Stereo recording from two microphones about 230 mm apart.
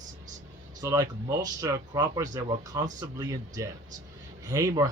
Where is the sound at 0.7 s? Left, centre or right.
Centre.